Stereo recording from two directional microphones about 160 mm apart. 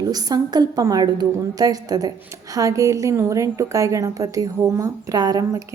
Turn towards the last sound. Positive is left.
turn(degrees=-20)  # may be behind; listen again after turning